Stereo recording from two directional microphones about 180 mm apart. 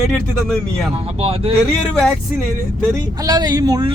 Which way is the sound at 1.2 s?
30° right (ahead or behind).